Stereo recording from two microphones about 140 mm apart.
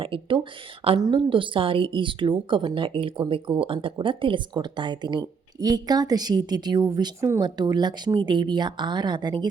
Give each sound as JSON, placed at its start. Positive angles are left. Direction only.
{"t": 0.0, "sound": "speech", "side_deg": -40}